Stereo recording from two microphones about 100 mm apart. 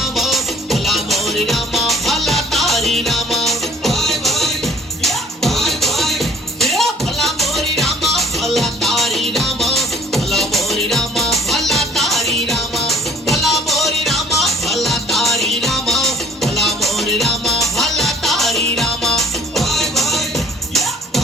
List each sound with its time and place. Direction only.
0.0 s music: centre (ahead or behind)